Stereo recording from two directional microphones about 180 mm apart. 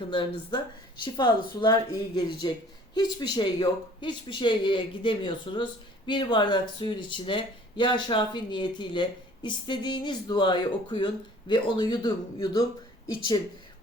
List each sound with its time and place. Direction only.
0.1 s speech: 25° left (ahead or behind)